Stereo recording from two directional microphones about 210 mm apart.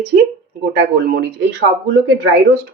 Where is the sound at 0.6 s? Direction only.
55° right (ahead or behind).